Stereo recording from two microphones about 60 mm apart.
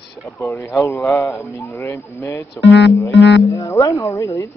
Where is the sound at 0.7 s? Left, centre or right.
Left.